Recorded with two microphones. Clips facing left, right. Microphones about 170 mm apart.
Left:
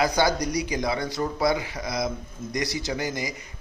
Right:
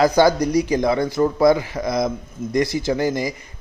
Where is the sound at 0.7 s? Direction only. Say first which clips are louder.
Right 8 dB; 50° right (ahead or behind).